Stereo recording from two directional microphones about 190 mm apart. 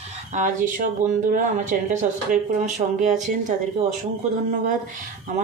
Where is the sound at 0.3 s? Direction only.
40° right (ahead or behind).